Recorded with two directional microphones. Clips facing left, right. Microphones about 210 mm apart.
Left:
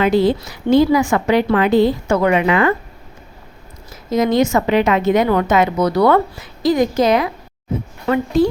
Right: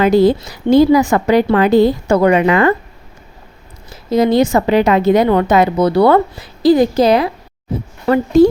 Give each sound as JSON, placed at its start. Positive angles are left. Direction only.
{"t": 0.0, "sound": "a woman's voice", "side_deg": -40}
{"t": 4.1, "sound": "a woman's voice", "side_deg": -35}